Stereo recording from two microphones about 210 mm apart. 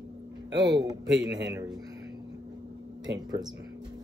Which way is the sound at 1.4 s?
15° right (ahead or behind).